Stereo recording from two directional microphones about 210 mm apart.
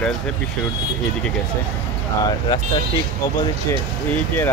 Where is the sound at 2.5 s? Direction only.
20° left (ahead or behind).